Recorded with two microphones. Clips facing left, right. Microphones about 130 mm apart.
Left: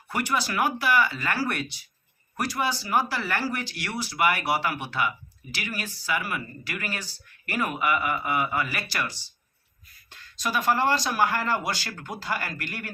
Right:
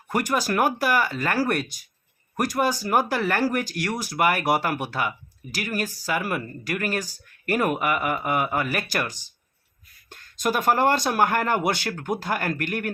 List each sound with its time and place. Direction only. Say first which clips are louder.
0.1 s speech: right 4 dB; 45° right (ahead or behind)